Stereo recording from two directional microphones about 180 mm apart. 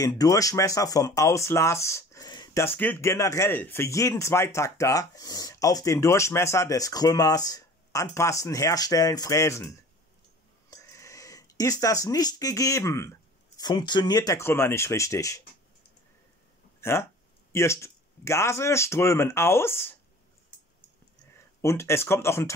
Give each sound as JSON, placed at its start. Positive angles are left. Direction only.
{"t": 0.0, "sound": "speech", "side_deg": 20}
{"t": 17.5, "sound": "speech", "side_deg": 15}
{"t": 21.5, "sound": "speech", "side_deg": 15}